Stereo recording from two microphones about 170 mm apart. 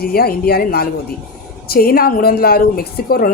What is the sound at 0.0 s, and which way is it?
A woman's voice, 65° left (ahead or behind).